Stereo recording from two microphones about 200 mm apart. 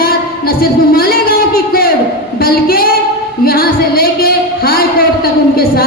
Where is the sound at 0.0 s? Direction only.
50° left (ahead or behind).